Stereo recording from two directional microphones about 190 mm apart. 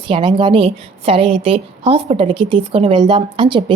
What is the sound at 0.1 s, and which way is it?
A woman's voice, 25° right (ahead or behind).